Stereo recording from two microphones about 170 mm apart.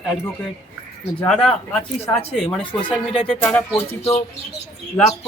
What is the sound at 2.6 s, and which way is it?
Speech, 30° left (ahead or behind).